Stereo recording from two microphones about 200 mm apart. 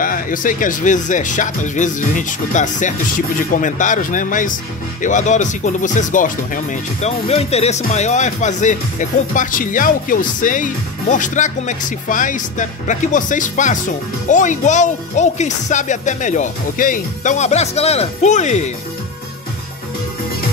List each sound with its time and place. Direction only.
0.0 s speech: 45° left (ahead or behind)